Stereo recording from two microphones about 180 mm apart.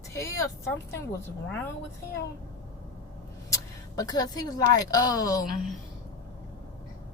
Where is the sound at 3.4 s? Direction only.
20° left (ahead or behind).